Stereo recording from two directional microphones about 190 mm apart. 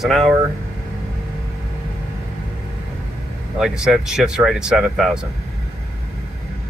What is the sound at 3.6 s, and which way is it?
Speech, centre (ahead or behind).